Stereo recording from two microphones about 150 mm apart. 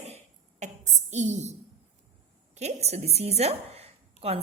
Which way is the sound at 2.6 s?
45° right (ahead or behind).